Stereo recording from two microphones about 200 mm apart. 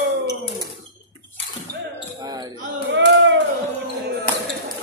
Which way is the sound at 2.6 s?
55° right (ahead or behind).